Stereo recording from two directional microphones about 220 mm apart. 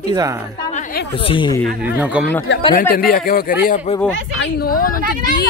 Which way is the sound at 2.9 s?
40° left (ahead or behind).